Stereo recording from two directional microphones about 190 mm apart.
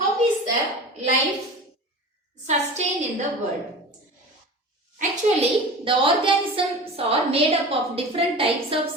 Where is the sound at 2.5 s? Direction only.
35° right (ahead or behind).